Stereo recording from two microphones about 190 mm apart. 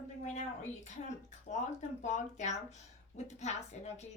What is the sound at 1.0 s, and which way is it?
A woman's voice, 40° left (ahead or behind).